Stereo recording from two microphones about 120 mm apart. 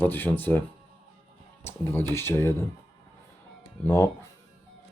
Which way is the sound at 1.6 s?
20° left (ahead or behind).